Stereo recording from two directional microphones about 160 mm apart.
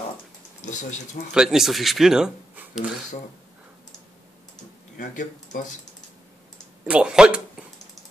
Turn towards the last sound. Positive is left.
turn(degrees=-5)  # may be behind; listen again after turning